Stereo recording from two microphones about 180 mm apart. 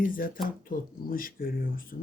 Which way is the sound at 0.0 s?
50° left (ahead or behind).